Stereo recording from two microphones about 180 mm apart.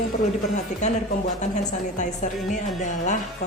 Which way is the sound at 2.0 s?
45° left (ahead or behind).